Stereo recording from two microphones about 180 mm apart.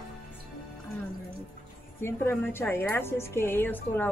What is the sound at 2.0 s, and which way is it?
A woman's voice, 10° left (ahead or behind).